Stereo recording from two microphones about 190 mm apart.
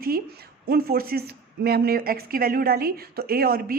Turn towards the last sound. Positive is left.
turn(degrees=-50)  # may be behind; listen again after turning